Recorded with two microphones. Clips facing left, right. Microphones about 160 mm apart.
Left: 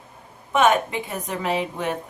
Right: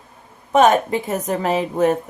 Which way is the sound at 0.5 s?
40° right (ahead or behind).